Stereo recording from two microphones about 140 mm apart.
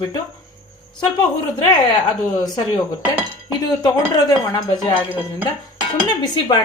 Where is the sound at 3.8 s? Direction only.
30° left (ahead or behind).